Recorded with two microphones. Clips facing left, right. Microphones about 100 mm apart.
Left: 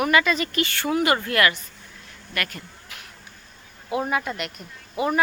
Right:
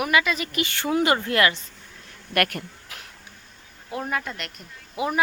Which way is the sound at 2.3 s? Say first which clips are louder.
Right 7 dB; 60° right (ahead or behind).